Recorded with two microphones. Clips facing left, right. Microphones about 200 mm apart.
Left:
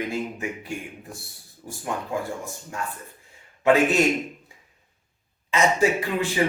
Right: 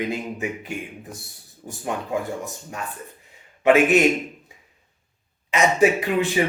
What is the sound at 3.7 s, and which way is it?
Speech, 15° right (ahead or behind).